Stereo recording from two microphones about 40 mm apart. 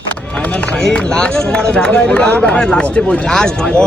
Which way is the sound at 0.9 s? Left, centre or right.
Left.